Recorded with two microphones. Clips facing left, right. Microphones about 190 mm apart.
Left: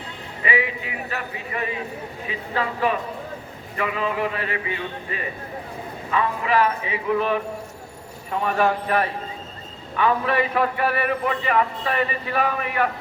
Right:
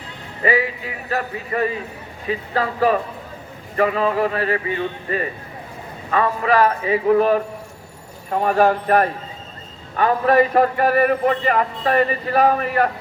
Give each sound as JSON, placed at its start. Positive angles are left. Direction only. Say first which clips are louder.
{"t": 0.4, "sound": "a man's voice", "louder": "right 5 dB", "side_deg": -40}